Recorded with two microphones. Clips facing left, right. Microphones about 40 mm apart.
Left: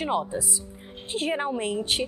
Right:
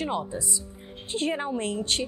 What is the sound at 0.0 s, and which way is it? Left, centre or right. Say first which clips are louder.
A woman's voice: left 3 dB; centre.